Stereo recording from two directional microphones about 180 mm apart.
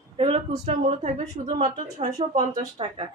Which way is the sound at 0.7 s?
40° right (ahead or behind).